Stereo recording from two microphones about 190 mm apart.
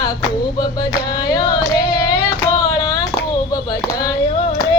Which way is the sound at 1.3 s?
20° left (ahead or behind).